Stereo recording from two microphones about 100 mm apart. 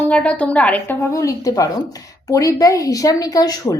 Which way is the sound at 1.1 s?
35° left (ahead or behind).